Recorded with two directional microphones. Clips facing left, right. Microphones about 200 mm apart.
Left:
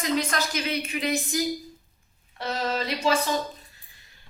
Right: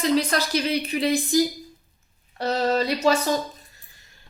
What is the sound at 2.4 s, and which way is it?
Speech, 40° right (ahead or behind).